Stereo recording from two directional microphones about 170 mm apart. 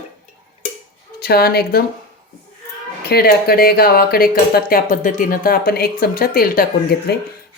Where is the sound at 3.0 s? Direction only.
65° left (ahead or behind).